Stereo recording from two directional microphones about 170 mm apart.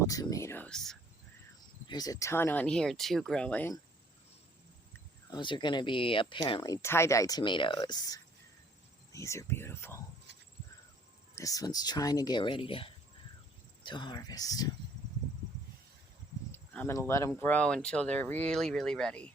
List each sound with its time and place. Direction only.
0.1 s speech: 20° left (ahead or behind)
1.9 s speech: 20° left (ahead or behind)
5.3 s speech: 25° left (ahead or behind)
11.3 s speech: 20° left (ahead or behind)
16.5 s speech: 15° left (ahead or behind)